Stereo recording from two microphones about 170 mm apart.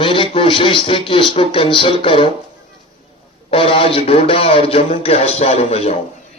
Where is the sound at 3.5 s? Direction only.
30° left (ahead or behind).